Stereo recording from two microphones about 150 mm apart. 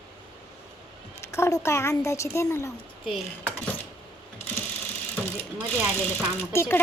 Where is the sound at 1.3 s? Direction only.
20° left (ahead or behind).